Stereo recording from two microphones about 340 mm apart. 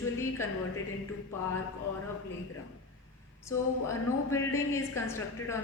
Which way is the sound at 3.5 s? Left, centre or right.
Centre.